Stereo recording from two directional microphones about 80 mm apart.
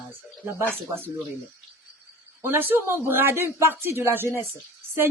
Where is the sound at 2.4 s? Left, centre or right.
Right.